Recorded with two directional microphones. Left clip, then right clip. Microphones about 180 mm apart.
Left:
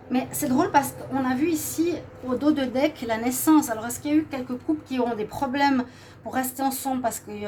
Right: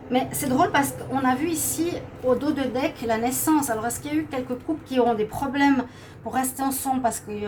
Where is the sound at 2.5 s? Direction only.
50° left (ahead or behind).